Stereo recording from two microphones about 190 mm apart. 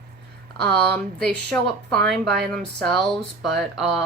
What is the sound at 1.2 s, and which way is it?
Speech, 5° left (ahead or behind).